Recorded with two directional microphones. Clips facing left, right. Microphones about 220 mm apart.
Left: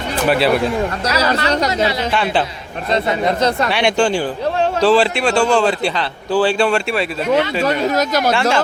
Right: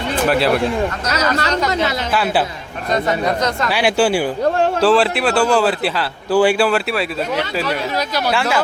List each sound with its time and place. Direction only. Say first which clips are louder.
0.3 s a man's voice: left 2 dB; centre (ahead or behind)
1.0 s speech: left 2 dB; 30° left (ahead or behind)
2.1 s a man's voice: right 2 dB; 5° right (ahead or behind)
2.9 s speech: left 1 dB; 30° left (ahead or behind)
3.7 s a man's voice: even; 5° right (ahead or behind)
7.6 s speech: left 5 dB; 45° left (ahead or behind)